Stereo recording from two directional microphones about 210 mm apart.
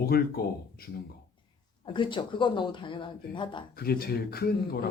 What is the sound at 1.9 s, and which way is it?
A woman's voice, 25° left (ahead or behind).